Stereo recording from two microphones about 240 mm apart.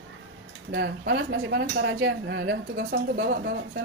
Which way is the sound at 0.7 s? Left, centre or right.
Right.